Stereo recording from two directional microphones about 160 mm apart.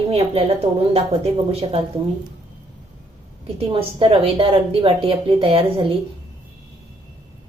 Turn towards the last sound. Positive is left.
turn(degrees=-35)  # may be behind; listen again after turning